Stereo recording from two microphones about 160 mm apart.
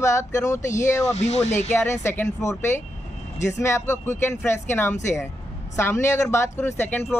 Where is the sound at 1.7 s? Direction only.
15° left (ahead or behind).